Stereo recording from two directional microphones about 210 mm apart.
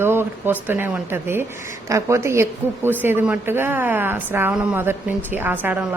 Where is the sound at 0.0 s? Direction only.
10° right (ahead or behind).